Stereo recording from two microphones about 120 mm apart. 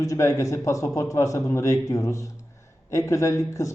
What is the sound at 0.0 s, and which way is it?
Speech, 25° left (ahead or behind).